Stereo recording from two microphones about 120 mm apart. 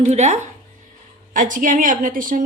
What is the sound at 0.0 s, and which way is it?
Speech, 75° right (ahead or behind).